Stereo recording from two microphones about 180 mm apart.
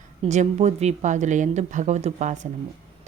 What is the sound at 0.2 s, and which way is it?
Speech, 40° right (ahead or behind).